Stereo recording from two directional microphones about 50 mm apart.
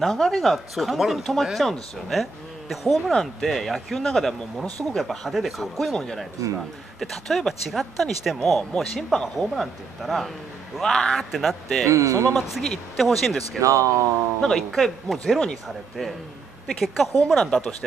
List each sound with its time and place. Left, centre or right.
0.0 s speech: centre
3.1 s speech: centre
7.0 s speech: centre
11.3 s speech: centre
11.9 s speech: right
12.4 s speech: centre
13.6 s speech: right
14.4 s speech: centre
16.6 s speech: centre